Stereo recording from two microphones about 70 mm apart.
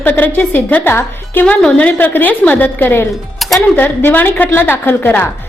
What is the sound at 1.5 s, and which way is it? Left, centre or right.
A woman's voice, centre.